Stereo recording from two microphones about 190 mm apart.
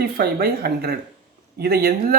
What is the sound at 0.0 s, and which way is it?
Speech, 55° right (ahead or behind).